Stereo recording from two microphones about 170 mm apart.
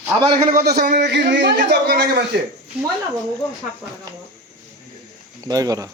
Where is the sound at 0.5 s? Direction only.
65° right (ahead or behind).